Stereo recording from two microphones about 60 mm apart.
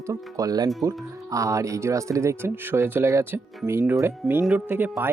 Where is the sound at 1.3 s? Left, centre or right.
Right.